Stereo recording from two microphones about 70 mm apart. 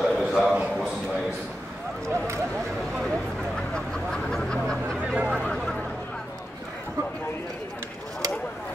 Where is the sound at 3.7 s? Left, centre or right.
Centre.